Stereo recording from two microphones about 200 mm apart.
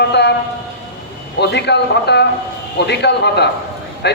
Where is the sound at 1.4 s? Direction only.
60° left (ahead or behind).